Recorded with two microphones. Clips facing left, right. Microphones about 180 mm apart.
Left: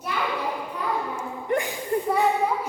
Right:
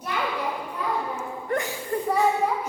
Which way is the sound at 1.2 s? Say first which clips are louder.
Left 2 dB; 15° left (ahead or behind).